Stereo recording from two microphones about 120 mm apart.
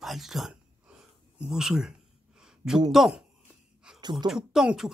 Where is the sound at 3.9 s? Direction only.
35° right (ahead or behind).